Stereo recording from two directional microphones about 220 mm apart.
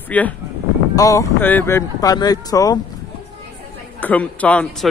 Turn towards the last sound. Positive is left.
turn(degrees=5)  # may be behind; listen again after turning